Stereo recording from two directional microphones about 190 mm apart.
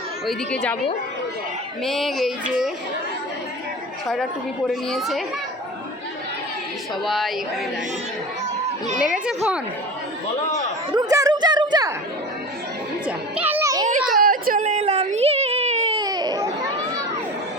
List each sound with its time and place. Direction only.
0.3 s speech: 5° left (ahead or behind)
1.8 s speech: centre (ahead or behind)
4.7 s speech: centre (ahead or behind)
7.0 s speech: centre (ahead or behind)
9.0 s speech: 5° right (ahead or behind)
10.9 s a sound: 20° right (ahead or behind)
13.1 s children playing: 10° right (ahead or behind)
14.2 s a sound: 50° right (ahead or behind)
16.0 s baby cry: 20° right (ahead or behind)